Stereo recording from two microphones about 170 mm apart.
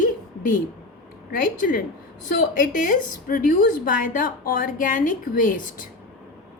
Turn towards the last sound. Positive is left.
turn(degrees=55)  # may be behind; listen again after turning